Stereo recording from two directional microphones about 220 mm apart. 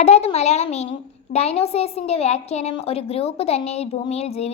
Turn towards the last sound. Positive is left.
turn(degrees=30)  # may be behind; listen again after turning